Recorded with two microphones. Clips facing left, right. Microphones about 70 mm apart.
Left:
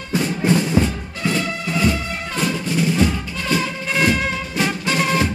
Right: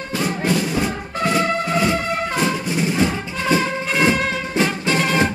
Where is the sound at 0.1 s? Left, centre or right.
Left.